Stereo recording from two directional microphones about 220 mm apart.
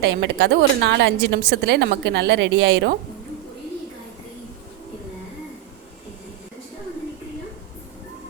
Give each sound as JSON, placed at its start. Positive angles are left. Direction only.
{"t": 0.0, "sound": "a woman's voice", "side_deg": -55}